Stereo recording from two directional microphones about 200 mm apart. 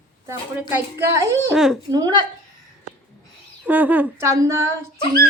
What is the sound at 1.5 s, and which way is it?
Speech, centre (ahead or behind).